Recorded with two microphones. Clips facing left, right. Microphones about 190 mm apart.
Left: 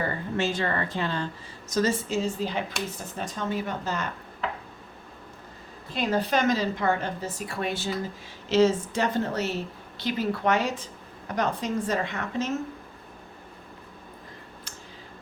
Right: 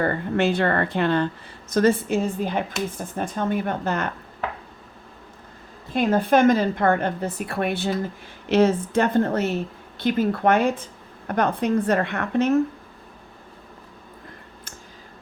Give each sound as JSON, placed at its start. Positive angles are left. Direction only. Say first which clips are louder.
{"t": 0.0, "sound": "a woman's voice", "louder": "right 6 dB", "side_deg": -60}
{"t": 5.9, "sound": "a woman's voice", "louder": "right 6 dB", "side_deg": -50}